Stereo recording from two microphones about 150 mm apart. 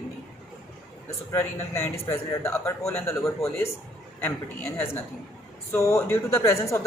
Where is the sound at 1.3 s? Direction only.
15° left (ahead or behind).